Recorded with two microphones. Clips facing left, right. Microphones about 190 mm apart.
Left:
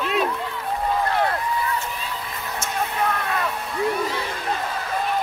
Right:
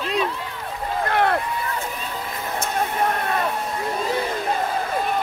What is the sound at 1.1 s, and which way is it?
Run, 60° right (ahead or behind).